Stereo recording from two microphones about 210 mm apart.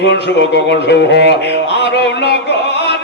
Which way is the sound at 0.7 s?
55° left (ahead or behind).